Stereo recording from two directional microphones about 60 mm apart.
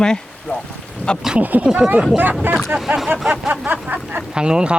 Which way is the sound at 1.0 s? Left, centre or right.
Left.